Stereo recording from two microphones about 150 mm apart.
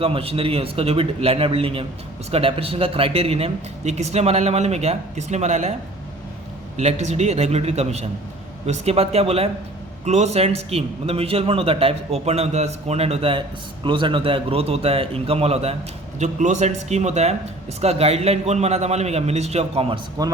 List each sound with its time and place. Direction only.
0.0 s a man's voice: 40° right (ahead or behind)
6.7 s a man's voice: 50° right (ahead or behind)
20.2 s speech: 25° right (ahead or behind)